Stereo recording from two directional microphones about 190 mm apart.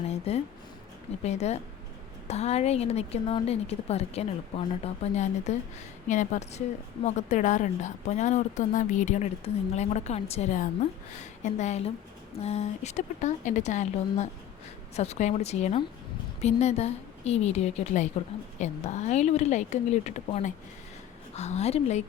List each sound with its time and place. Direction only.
0.1 s a woman's voice: 35° left (ahead or behind)